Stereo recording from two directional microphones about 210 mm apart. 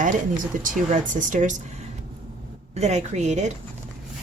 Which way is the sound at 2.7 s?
30° right (ahead or behind).